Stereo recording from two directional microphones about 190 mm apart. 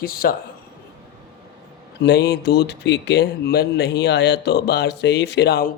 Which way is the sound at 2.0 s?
60° left (ahead or behind).